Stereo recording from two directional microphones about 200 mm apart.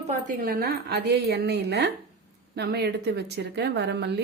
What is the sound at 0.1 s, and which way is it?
A woman's voice, 40° right (ahead or behind).